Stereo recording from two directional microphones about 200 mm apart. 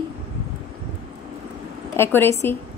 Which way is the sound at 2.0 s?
10° left (ahead or behind).